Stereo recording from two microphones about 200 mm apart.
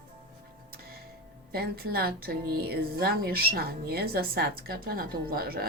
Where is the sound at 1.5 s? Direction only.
50° right (ahead or behind).